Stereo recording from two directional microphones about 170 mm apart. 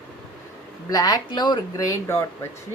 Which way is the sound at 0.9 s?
20° left (ahead or behind).